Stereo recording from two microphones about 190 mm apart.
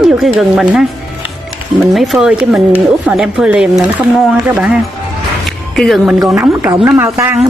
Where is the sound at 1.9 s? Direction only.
Centre (ahead or behind).